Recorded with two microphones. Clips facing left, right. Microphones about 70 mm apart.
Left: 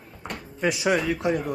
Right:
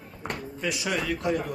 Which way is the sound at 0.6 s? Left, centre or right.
Left.